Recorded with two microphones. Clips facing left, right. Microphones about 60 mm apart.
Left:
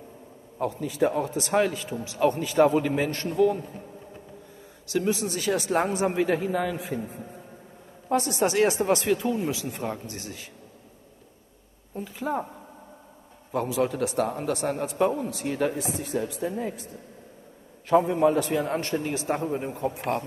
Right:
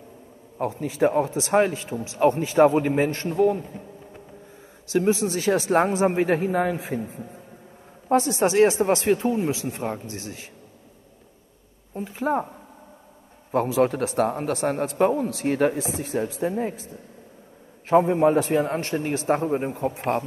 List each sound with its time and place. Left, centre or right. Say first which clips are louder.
0.6 s speech: right 2 dB; right
4.9 s speech: right 5 dB; right
8.1 s speech: right 4 dB; right
12.0 s speech: right 5 dB; right
13.5 s a man's voice: right 5 dB; right
17.8 s speech: right 3 dB; right